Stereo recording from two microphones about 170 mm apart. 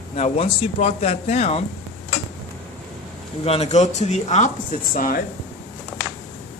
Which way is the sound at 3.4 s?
40° left (ahead or behind).